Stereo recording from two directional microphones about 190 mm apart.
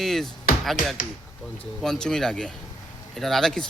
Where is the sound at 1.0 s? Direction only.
45° left (ahead or behind).